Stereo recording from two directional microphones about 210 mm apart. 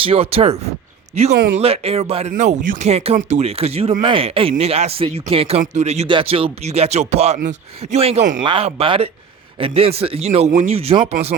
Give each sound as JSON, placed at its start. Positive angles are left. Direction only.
{"t": 0.0, "sound": "speech", "side_deg": -25}